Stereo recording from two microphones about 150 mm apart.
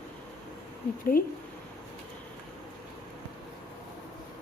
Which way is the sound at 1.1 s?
65° left (ahead or behind).